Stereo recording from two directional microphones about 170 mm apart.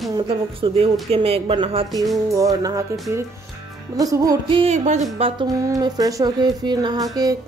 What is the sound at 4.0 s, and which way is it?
Speech, 20° right (ahead or behind).